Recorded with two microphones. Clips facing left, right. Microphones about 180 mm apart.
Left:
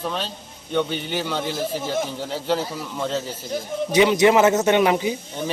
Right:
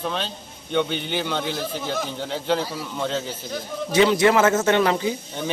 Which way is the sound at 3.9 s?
20° left (ahead or behind).